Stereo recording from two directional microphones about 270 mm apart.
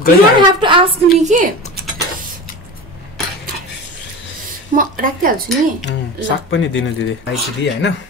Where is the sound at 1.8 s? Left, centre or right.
Right.